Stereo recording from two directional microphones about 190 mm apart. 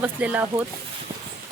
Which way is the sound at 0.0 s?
10° right (ahead or behind).